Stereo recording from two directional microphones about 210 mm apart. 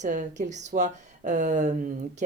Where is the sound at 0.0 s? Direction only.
35° right (ahead or behind).